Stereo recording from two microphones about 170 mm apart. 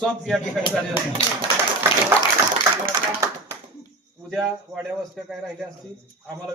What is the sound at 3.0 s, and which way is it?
Clapping, 25° right (ahead or behind).